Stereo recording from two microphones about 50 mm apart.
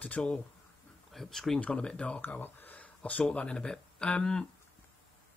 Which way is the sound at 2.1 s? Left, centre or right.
Left.